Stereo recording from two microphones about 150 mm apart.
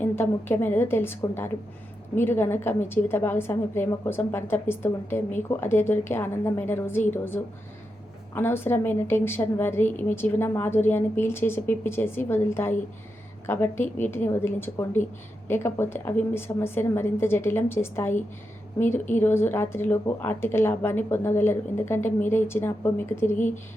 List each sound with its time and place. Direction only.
0.0 s a woman's voice: 15° left (ahead or behind)
19.2 s a woman's voice: 15° left (ahead or behind)